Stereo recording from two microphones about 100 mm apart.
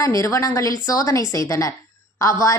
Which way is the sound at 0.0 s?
35° left (ahead or behind).